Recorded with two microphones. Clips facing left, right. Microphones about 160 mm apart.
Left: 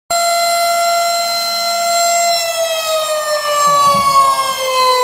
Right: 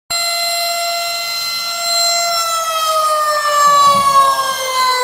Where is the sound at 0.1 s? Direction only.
40° left (ahead or behind).